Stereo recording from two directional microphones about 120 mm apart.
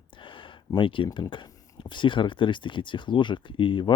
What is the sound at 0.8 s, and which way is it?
Speech, 45° left (ahead or behind).